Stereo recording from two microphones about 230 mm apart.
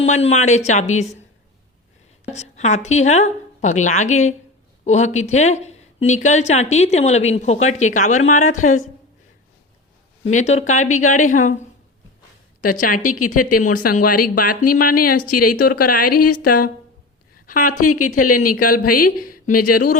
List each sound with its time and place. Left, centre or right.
0.0 s a woman's voice: left
2.3 s a woman's voice: left
10.2 s a woman's voice: left
12.8 s a woman's voice: left
15.9 s a woman's voice: left
16.4 s a woman's voice: left
17.4 s a sound: left
17.7 s speech: left
18.1 s a woman's voice: left